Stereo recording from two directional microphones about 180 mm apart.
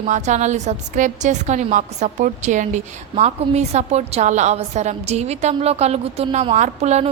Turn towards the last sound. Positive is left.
turn(degrees=-40)  # may be behind; listen again after turning